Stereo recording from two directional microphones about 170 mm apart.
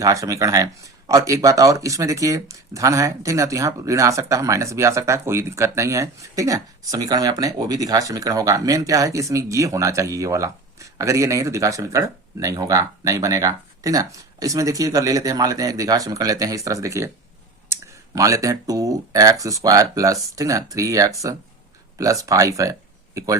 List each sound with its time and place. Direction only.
0.0 s speech: 20° right (ahead or behind)